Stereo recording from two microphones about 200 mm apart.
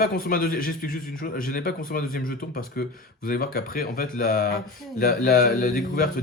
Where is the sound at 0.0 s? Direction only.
45° left (ahead or behind).